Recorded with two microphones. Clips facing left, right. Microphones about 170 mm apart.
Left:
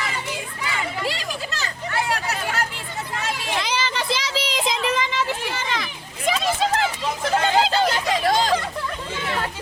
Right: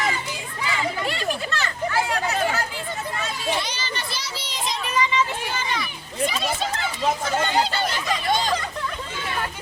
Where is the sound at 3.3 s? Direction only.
90° left.